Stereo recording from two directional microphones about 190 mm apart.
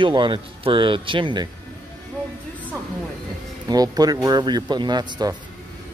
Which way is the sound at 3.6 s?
20° right (ahead or behind).